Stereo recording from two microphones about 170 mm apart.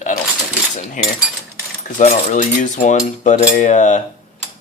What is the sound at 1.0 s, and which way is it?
Cutlery, 50° left (ahead or behind).